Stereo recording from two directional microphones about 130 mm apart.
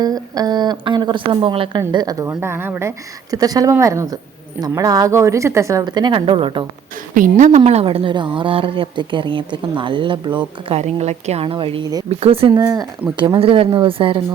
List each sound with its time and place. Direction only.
0.0 s a woman's voice: 30° right (ahead or behind)
1.9 s a woman's voice: 30° right (ahead or behind)
7.1 s a woman's voice: 80° right; by 10.8 s 40° right (ahead or behind)
10.8 s a woman's voice: 55° right (ahead or behind)
11.5 s speech: 45° right (ahead or behind)
12.5 s a woman's voice: 25° right (ahead or behind)
13.1 s a woman's voice: 35° right (ahead or behind)